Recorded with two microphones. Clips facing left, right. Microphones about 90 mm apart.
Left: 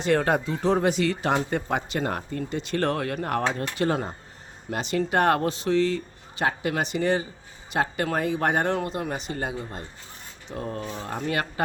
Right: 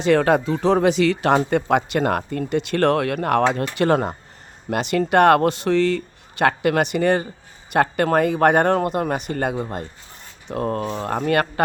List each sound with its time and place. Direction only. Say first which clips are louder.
0.0 s speech: right 6 dB; 90° right; by 11.6 s 60° right (ahead or behind)